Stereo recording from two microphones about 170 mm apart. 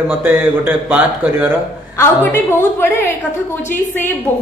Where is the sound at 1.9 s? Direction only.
15° left (ahead or behind).